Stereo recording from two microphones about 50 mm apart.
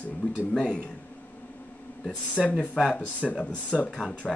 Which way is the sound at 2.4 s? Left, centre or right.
Centre.